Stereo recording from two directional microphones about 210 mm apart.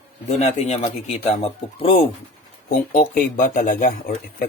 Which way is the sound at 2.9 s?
40° left (ahead or behind).